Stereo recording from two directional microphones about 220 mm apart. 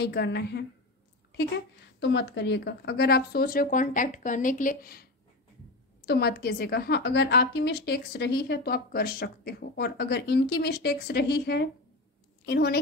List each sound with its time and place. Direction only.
0.0 s a woman's voice: 50° left (ahead or behind)
2.0 s a woman's voice: 55° left (ahead or behind)